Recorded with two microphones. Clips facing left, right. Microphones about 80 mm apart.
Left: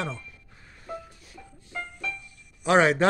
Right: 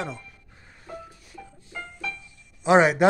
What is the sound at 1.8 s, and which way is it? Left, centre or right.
Music, right.